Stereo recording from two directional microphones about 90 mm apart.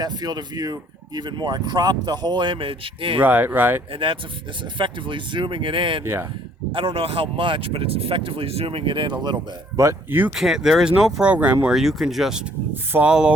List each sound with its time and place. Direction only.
0.0 s speech: 50° right (ahead or behind); by 3.2 s 80° right
3.2 s speech: 20° right (ahead or behind)
3.9 s speech: 80° right
4.6 s speech: 65° right (ahead or behind)
6.0 s speech: 25° right (ahead or behind)
6.7 s speech: 80° right; by 9.4 s 55° right (ahead or behind)
9.7 s speech: 35° right (ahead or behind)
10.3 s speech: 5° right (ahead or behind)
11.7 s speech: 5° right (ahead or behind)
12.7 s speech: 25° right (ahead or behind)
13.1 s speech: 10° right (ahead or behind)